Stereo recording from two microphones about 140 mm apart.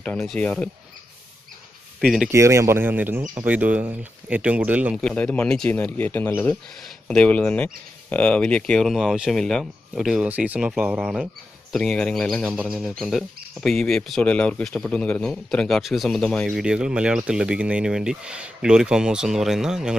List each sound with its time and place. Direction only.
0.0 s speech: 5° left (ahead or behind)
2.0 s speech: 5° right (ahead or behind)
2.3 s speech: 20° right (ahead or behind)
4.9 s speech: 10° left (ahead or behind)
12.5 s speech: 5° right (ahead or behind)
16.5 s speech: 5° right (ahead or behind)